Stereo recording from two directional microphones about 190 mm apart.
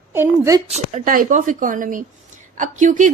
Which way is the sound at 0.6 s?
35° right (ahead or behind).